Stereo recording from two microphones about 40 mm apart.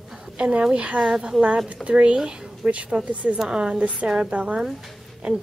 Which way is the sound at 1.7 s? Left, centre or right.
Right.